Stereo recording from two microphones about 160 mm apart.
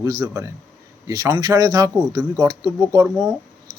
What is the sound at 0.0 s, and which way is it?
Speech, 20° right (ahead or behind).